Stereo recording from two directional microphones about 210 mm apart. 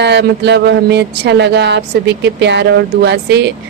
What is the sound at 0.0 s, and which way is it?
Speech, 55° right (ahead or behind).